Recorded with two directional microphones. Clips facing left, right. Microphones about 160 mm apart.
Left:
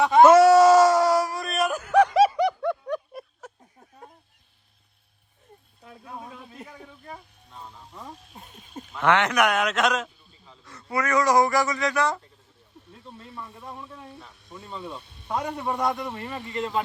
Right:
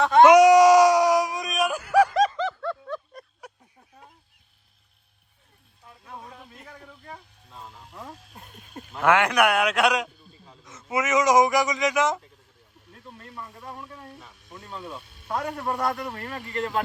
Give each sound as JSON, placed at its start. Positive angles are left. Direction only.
{"t": 0.0, "sound": "speech", "side_deg": 5}
{"t": 0.3, "sound": "a sound", "side_deg": -15}
{"t": 2.1, "sound": "snicker", "side_deg": 10}
{"t": 7.5, "sound": "a sound", "side_deg": 0}
{"t": 10.6, "sound": "speech", "side_deg": -20}
{"t": 12.9, "sound": "speech", "side_deg": 5}